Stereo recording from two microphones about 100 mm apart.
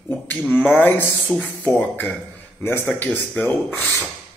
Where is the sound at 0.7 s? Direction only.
20° left (ahead or behind).